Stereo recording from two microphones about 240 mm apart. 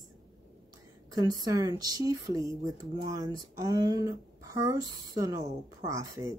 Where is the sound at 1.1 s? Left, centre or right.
Centre.